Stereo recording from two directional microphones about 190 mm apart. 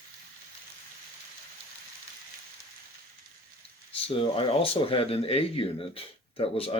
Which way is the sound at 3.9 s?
30° left (ahead or behind).